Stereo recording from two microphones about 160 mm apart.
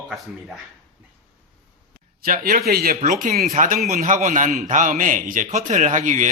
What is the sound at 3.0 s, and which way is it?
A man's voice, 55° right (ahead or behind).